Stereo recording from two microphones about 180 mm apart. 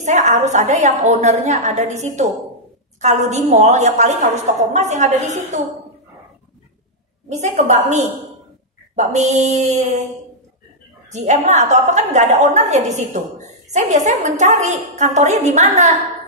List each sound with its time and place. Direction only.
0.0 s a woman's voice: 40° right (ahead or behind)
7.2 s a woman's voice: 40° right (ahead or behind)
11.1 s a woman's voice: 40° right (ahead or behind)